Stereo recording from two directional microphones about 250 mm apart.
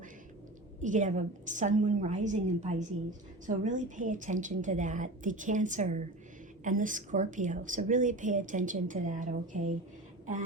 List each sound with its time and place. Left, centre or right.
0.8 s a woman's voice: right